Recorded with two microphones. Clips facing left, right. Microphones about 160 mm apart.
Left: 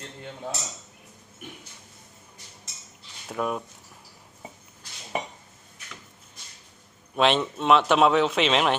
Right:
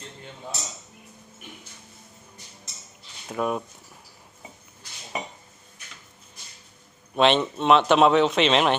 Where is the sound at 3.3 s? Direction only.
Centre (ahead or behind).